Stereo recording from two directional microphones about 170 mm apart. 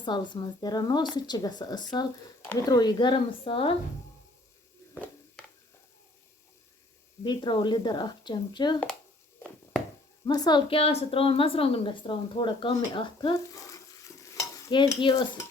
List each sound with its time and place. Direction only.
0.0 s speech: 25° left (ahead or behind)
7.3 s speech: 25° left (ahead or behind)
10.2 s a woman's voice: 25° left (ahead or behind)
13.3 s stir: 20° left (ahead or behind)